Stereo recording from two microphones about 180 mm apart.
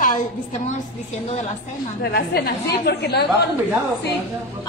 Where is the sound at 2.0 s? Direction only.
60° left (ahead or behind).